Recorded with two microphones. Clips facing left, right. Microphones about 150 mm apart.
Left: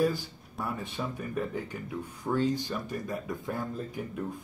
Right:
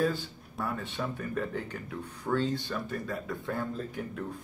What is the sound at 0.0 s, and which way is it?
Speech, 10° left (ahead or behind).